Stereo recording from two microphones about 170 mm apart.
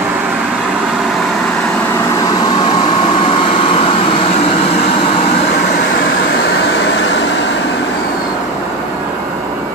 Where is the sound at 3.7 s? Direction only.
30° left (ahead or behind).